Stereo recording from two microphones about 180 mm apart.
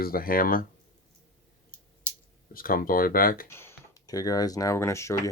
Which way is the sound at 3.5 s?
15° left (ahead or behind).